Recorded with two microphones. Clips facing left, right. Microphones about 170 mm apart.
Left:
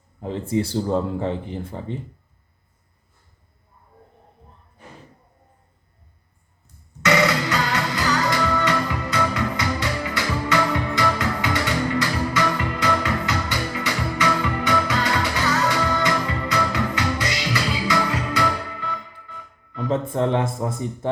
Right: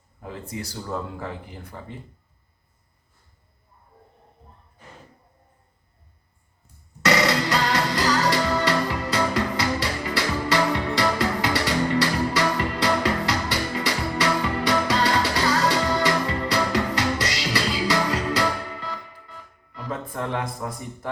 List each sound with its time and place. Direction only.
0.2 s speech: 25° left (ahead or behind)
7.0 s music: 35° right (ahead or behind)
19.9 s speech: 25° left (ahead or behind)